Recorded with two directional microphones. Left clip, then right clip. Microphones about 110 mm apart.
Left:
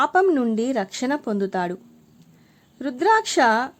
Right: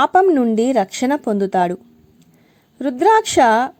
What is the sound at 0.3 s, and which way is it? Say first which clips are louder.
A woman's voice: right 6 dB; 35° right (ahead or behind).